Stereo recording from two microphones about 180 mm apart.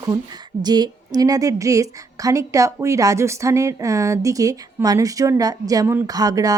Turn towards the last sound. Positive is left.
turn(degrees=-20)  # may be behind; listen again after turning